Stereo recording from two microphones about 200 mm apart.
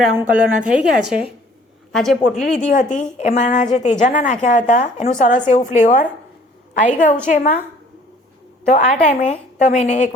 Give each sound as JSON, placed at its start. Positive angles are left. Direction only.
{"t": 0.0, "sound": "a woman's voice", "side_deg": -5}
{"t": 2.6, "sound": "a woman's voice", "side_deg": 40}
{"t": 8.7, "sound": "a woman's voice", "side_deg": 35}